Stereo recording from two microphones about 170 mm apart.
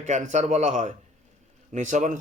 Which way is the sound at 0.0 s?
45° right (ahead or behind).